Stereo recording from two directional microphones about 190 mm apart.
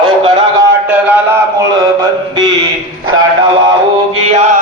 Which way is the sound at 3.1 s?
90° right.